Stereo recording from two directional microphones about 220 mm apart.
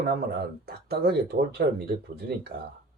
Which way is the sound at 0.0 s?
45° right (ahead or behind).